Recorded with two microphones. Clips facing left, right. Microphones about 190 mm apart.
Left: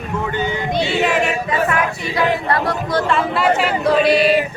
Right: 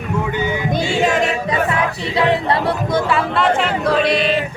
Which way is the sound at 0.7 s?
45° right (ahead or behind).